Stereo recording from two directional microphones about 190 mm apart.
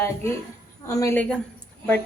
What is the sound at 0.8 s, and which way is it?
Speech, 15° left (ahead or behind).